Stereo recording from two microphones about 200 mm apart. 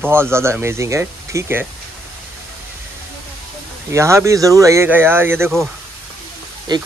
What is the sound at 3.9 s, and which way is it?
Speech, 15° right (ahead or behind).